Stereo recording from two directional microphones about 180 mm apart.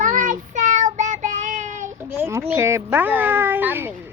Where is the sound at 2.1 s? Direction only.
15° right (ahead or behind).